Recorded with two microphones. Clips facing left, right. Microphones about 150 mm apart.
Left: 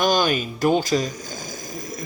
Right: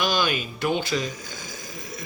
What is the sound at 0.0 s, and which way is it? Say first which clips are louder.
Speech: left 5 dB; 45° left (ahead or behind).